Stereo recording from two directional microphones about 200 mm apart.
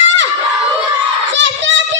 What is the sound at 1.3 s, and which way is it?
Crowd, 65° right (ahead or behind).